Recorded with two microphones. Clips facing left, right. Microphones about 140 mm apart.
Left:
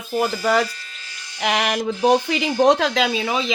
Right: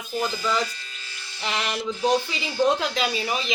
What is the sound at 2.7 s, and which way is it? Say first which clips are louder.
Speech: left 7 dB; 90° left.